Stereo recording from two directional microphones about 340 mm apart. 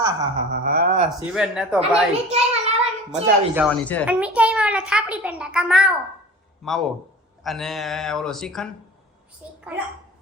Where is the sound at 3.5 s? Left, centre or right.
Centre.